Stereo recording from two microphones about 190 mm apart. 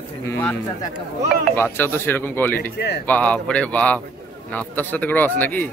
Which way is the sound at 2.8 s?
60° left (ahead or behind).